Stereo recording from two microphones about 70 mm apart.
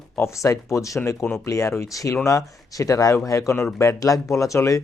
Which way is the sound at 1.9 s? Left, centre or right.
Left.